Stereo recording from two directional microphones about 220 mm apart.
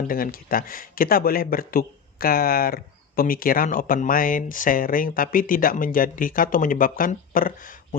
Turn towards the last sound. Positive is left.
turn(degrees=40)  # may be behind; listen again after turning